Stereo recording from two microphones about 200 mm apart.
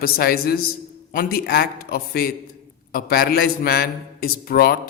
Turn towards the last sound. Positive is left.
turn(degrees=50)  # may be behind; listen again after turning